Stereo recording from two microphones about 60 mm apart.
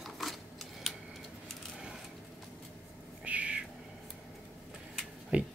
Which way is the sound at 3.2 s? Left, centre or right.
Right.